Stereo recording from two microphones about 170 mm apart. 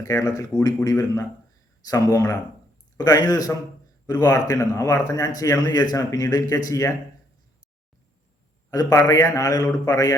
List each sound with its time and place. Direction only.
0.0 s a man's voice: 20° left (ahead or behind)
8.7 s a man's voice: 20° left (ahead or behind)